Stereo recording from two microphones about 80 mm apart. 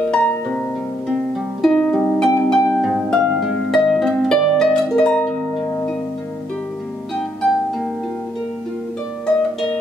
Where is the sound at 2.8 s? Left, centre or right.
Centre.